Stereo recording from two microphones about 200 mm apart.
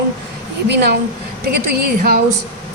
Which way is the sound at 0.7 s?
55° right (ahead or behind).